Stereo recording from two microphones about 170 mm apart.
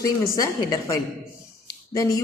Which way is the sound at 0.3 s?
20° left (ahead or behind).